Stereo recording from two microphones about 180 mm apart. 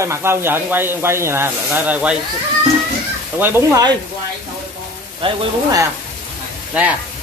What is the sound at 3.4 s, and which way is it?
Speech, 20° right (ahead or behind).